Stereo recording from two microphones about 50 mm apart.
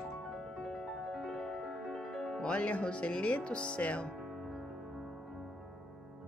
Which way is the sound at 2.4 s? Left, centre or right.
Left.